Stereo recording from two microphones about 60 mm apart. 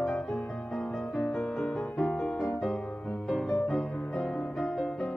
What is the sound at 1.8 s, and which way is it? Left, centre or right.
Music, left.